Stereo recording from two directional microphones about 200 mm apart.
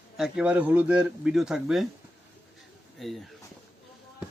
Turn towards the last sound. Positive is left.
turn(degrees=0)  # may be behind; listen again after turning